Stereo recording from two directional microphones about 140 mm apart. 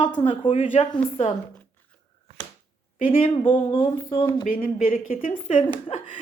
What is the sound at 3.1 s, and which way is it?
Speech, 40° left (ahead or behind).